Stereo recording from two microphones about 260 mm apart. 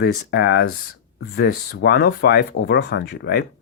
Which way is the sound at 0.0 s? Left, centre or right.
Left.